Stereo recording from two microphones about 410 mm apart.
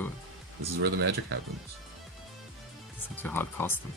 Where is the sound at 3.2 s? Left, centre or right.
Centre.